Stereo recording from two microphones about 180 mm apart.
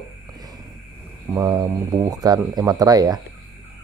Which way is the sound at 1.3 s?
20° right (ahead or behind).